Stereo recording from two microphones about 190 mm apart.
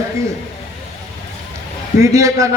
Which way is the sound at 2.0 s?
15° right (ahead or behind).